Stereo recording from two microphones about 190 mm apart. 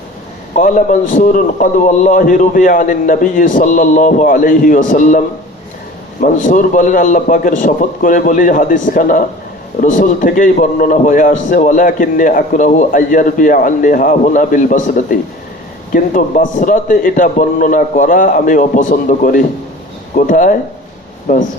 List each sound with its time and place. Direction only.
0.5 s a man's voice: 40° left (ahead or behind)